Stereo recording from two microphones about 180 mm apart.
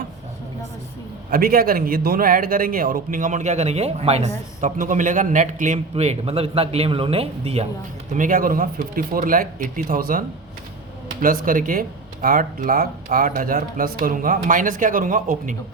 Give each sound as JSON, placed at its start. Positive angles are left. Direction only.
{"t": 1.3, "sound": "speech", "side_deg": -55}
{"t": 8.1, "sound": "speech", "side_deg": -50}